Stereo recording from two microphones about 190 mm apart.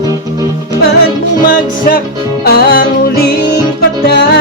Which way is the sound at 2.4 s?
55° left (ahead or behind).